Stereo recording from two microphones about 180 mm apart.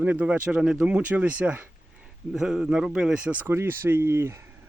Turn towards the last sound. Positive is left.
turn(degrees=-15)  # may be behind; listen again after turning